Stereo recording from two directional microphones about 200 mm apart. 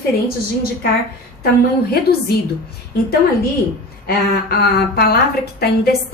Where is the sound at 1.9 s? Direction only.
50° left (ahead or behind).